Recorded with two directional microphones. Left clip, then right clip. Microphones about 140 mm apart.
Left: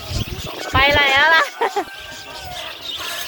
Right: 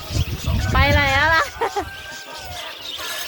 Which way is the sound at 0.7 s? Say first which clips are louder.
Left 4 dB; 10° right (ahead or behind).